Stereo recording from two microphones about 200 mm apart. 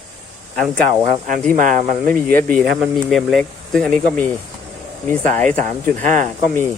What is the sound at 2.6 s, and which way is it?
Speech, 5° right (ahead or behind).